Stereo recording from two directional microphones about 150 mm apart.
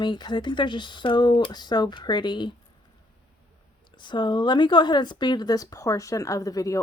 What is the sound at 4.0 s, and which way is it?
Speech, 30° left (ahead or behind).